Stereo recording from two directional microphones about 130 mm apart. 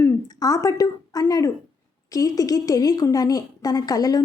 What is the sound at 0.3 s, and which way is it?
A woman's voice, 30° left (ahead or behind).